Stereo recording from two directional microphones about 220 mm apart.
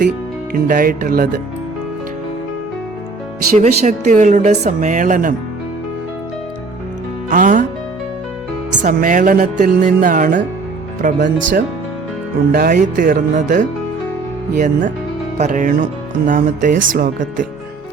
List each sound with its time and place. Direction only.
0.5 s speech: 40° right (ahead or behind)
3.5 s speech: 35° right (ahead or behind)
7.3 s music: 40° right (ahead or behind)
8.8 s speech: 35° right (ahead or behind)
11.2 s speech: 55° right (ahead or behind)
12.5 s speech: 40° right (ahead or behind)